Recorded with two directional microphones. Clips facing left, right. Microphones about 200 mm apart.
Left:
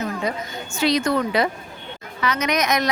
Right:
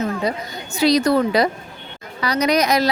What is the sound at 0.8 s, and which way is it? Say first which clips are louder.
A woman's voice: right 4 dB; 35° right (ahead or behind).